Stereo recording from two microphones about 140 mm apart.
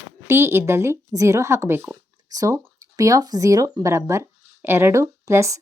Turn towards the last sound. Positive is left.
turn(degrees=-20)  # may be behind; listen again after turning